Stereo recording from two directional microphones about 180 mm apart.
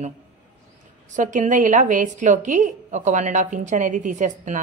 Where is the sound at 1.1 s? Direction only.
45° right (ahead or behind).